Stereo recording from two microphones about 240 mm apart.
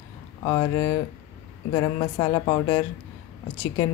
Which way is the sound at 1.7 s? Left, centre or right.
Centre.